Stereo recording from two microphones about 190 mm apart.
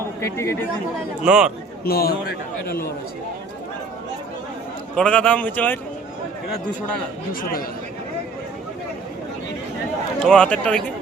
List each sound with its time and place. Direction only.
0.2 s a man's voice: 15° left (ahead or behind)
1.2 s speech: 5° right (ahead or behind)
1.8 s a man's voice: 55° left (ahead or behind)
4.9 s a man's voice: 5° left (ahead or behind)
10.2 s speech: 5° left (ahead or behind)